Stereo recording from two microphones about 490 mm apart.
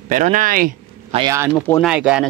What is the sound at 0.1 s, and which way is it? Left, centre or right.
Speech, centre.